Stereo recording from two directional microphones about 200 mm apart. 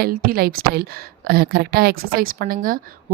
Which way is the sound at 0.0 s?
50° right (ahead or behind).